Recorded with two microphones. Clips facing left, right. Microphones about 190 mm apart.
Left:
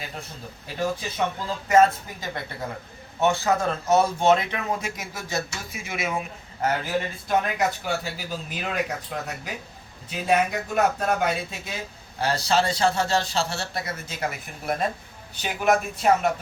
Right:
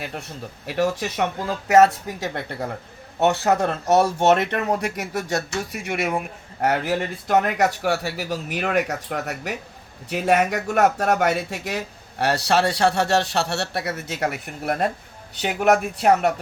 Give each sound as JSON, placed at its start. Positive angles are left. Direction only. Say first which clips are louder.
{"t": 0.7, "sound": "speech", "louder": "right 5 dB", "side_deg": -75}